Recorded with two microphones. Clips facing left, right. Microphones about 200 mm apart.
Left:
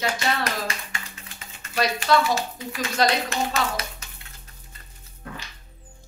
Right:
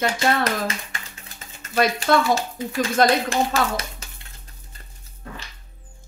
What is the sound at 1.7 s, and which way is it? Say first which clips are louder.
Speech: right 2 dB; 50° right (ahead or behind).